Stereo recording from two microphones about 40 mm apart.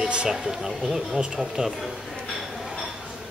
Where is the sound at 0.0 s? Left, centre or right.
Right.